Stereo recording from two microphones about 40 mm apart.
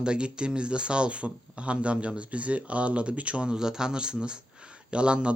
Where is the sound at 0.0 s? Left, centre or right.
Right.